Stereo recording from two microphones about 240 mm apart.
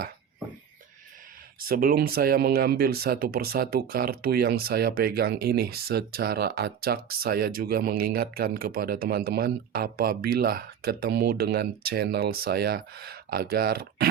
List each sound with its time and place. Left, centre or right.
1.5 s speech: right